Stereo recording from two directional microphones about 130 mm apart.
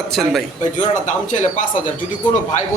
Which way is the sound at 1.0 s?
70° left (ahead or behind).